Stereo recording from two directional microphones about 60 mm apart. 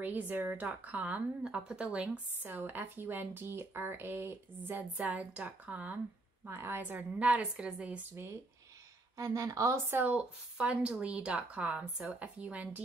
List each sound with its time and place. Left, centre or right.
0.0 s a woman's voice: right
4.9 s speech: right
6.4 s speech: right
6.8 s speech: right
9.1 s a woman's voice: right
10.0 s speech: right